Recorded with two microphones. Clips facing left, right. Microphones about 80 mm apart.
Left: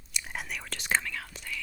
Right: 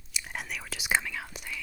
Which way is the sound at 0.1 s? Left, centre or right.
Centre.